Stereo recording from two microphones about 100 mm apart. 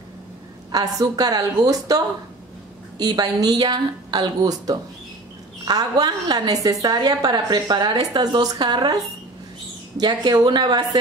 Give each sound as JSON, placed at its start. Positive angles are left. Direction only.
{"t": 0.7, "sound": "a woman's voice", "side_deg": -40}
{"t": 9.9, "sound": "a woman's voice", "side_deg": -45}